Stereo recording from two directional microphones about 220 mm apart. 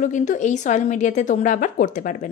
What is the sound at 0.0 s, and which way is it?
A woman's voice, 35° left (ahead or behind).